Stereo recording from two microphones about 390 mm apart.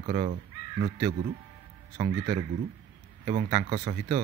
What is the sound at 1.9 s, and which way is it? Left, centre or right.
Speech, centre.